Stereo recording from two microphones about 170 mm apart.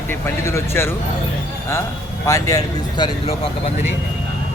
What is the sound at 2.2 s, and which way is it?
Speech, 20° left (ahead or behind).